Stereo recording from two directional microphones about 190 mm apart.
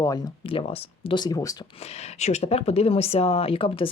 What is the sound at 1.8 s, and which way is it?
Speech, 35° left (ahead or behind).